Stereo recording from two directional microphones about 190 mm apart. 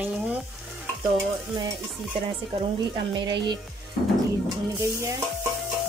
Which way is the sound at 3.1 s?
25° right (ahead or behind).